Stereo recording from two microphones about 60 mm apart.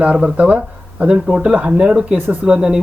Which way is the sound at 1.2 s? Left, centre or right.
Centre.